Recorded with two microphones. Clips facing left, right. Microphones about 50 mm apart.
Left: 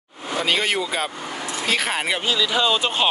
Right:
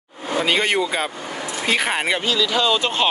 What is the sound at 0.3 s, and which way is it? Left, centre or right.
Speech, centre.